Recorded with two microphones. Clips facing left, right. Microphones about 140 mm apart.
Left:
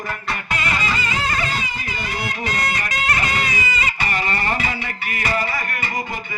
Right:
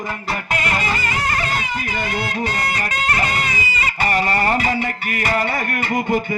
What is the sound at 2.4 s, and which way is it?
Speech, 35° right (ahead or behind).